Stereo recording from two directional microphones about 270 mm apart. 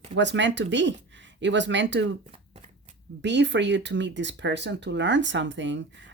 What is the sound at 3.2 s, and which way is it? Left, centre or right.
Speech, right.